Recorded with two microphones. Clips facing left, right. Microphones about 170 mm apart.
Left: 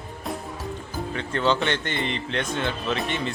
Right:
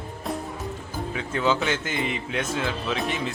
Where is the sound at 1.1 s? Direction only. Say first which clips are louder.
Left 1 dB; 5° right (ahead or behind).